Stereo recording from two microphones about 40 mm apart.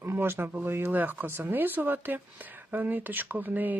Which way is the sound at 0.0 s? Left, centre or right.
Right.